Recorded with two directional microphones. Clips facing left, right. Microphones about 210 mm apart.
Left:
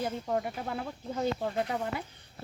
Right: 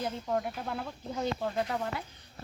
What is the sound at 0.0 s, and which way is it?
Speech, 5° left (ahead or behind).